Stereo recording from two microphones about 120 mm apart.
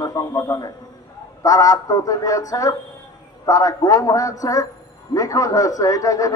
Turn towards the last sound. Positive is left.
turn(degrees=30)  # may be behind; listen again after turning